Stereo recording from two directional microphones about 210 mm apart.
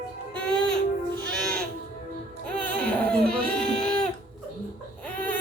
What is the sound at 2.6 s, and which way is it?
Baby cry, 5° left (ahead or behind).